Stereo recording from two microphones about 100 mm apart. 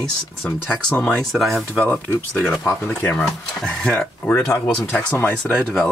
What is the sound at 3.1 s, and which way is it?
Speech, 5° left (ahead or behind).